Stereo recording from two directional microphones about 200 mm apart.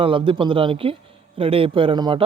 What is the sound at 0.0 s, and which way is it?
Speech, 25° right (ahead or behind).